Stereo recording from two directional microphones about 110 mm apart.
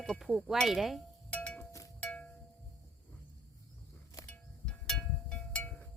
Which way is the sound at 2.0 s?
10° left (ahead or behind).